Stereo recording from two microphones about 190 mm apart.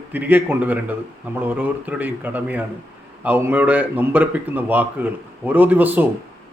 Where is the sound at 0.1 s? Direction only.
10° right (ahead or behind).